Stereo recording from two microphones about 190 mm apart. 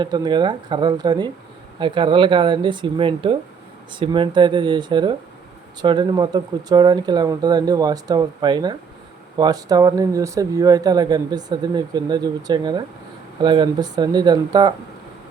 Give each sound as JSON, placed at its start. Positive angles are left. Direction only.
{"t": 0.0, "sound": "speech", "side_deg": -20}